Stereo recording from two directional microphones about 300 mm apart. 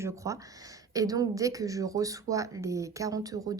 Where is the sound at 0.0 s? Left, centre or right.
Centre.